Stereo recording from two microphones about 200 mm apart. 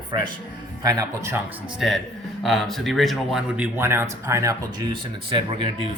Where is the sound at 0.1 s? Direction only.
20° right (ahead or behind).